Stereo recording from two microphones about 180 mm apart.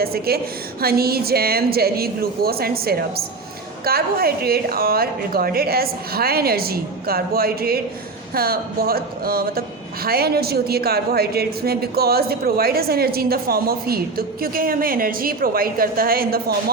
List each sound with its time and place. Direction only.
0.0 s speech: 55° right (ahead or behind)